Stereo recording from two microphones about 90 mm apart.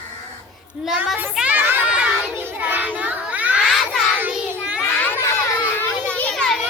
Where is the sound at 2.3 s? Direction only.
25° right (ahead or behind).